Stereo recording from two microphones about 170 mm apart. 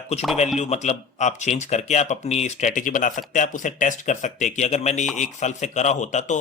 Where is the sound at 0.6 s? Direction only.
40° left (ahead or behind).